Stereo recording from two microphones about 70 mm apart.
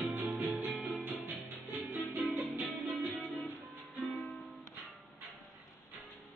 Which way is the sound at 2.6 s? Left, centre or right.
Centre.